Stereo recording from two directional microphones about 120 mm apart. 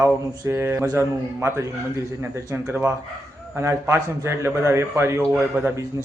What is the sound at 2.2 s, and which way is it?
A man's voice, 20° right (ahead or behind).